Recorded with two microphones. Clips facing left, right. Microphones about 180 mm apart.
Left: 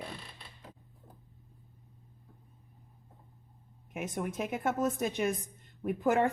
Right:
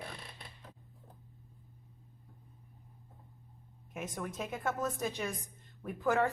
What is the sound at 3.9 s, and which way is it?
Speech, 20° left (ahead or behind).